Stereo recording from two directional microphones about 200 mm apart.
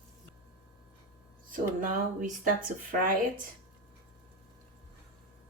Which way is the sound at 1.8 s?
40° right (ahead or behind).